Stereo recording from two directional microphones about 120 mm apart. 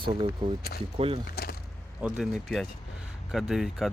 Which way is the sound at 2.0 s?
5° right (ahead or behind).